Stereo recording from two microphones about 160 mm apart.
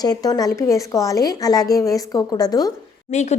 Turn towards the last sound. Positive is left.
turn(degrees=45)  # may be behind; listen again after turning